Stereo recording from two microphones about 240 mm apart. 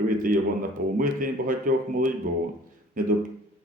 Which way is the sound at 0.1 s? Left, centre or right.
Right.